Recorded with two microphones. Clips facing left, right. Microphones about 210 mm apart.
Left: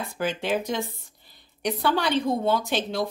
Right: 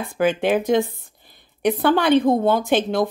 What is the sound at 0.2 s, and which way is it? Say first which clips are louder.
A woman's voice: right 8 dB; 55° right (ahead or behind).